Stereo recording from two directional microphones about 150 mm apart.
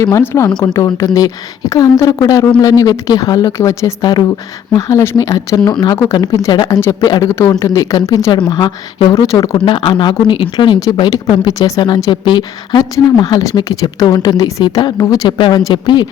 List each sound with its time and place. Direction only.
0.0 s a woman's voice: 20° left (ahead or behind)
9.6 s a woman's voice: 35° left (ahead or behind)